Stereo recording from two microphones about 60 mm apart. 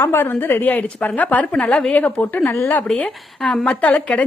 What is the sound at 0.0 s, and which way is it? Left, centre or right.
A woman's voice, left.